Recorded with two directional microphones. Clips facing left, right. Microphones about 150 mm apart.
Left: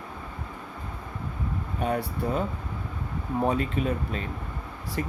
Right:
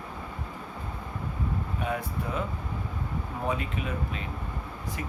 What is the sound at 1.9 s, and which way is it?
Speech, 35° left (ahead or behind).